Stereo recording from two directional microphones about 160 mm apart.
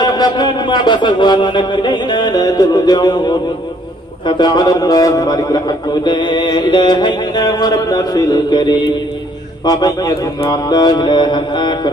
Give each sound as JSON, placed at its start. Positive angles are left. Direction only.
{"t": 0.0, "sound": "a man's voice", "side_deg": 25}